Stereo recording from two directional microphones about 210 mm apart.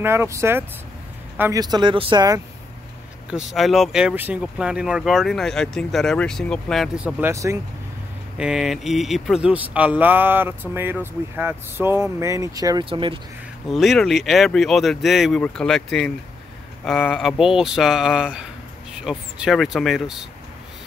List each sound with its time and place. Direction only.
0.0 s speech: 10° right (ahead or behind)
3.3 s speech: centre (ahead or behind); by 13.2 s 25° right (ahead or behind)
13.7 s speech: centre (ahead or behind)